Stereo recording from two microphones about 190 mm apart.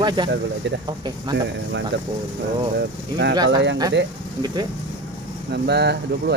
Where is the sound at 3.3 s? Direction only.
20° right (ahead or behind).